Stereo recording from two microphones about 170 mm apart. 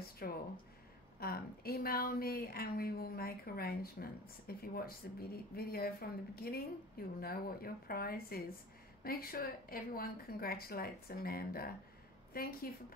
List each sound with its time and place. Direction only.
0.2 s a woman's voice: 65° left (ahead or behind)